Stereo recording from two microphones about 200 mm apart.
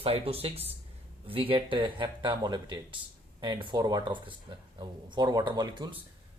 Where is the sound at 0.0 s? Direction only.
30° right (ahead or behind).